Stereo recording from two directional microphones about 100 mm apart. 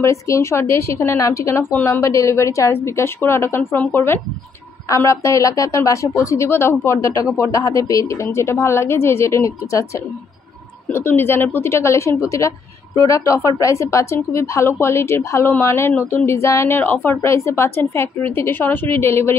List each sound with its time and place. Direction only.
0.0 s a woman's voice: 30° left (ahead or behind)